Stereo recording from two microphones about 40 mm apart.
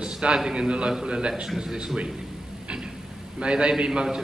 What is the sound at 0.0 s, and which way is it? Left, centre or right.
A man's voice, right.